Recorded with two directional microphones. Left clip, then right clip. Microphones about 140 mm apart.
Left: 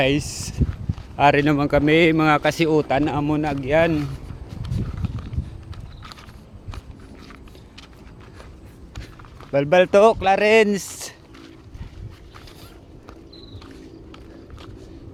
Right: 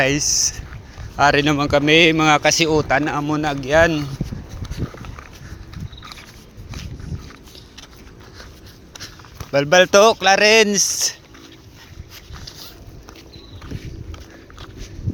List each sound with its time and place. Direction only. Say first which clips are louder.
0.0 s speech: right 4 dB; 30° left (ahead or behind)
1.1 s speech: right 1 dB; 15° left (ahead or behind)
3.3 s speech: right 4 dB; 5° left (ahead or behind)
9.5 s speech: right 3 dB; 15° left (ahead or behind)